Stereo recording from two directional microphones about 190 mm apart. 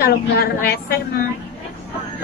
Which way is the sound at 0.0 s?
55° left (ahead or behind).